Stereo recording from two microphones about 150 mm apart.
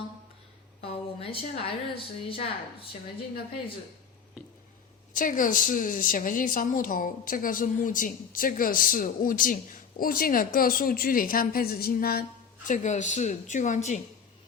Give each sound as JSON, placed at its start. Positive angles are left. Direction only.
{"t": 0.8, "sound": "a woman's voice", "side_deg": 40}
{"t": 5.1, "sound": "a woman's voice", "side_deg": 65}
{"t": 12.6, "sound": "a woman's voice", "side_deg": 55}